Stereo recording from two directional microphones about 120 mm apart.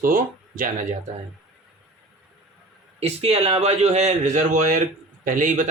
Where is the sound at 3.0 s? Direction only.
60° right (ahead or behind); by 5.7 s 90° right.